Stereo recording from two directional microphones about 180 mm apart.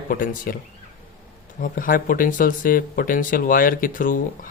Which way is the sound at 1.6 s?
50° left (ahead or behind).